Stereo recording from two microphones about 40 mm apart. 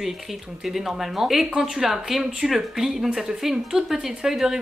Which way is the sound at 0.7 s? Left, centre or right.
Centre.